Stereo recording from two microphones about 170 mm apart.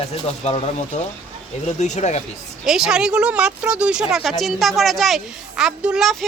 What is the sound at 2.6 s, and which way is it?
A woman's voice, 5° right (ahead or behind).